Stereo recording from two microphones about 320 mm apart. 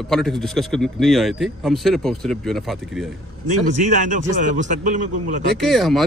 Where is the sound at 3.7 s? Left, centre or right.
Right.